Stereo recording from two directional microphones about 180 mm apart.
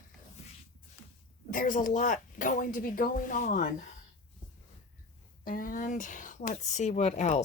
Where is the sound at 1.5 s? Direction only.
50° left (ahead or behind).